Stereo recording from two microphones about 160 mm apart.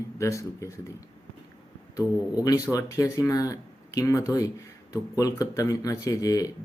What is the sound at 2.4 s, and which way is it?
Speech, 20° left (ahead or behind).